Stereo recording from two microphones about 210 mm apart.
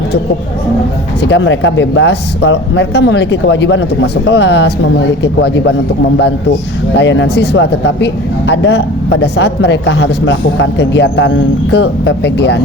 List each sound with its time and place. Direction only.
1.2 s speech: 60° left (ahead or behind)
6.9 s speech: 55° left (ahead or behind)